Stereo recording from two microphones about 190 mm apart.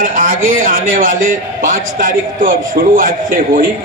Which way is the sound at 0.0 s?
45° right (ahead or behind).